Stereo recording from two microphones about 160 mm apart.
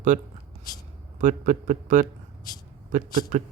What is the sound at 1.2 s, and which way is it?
Speech, 55° right (ahead or behind).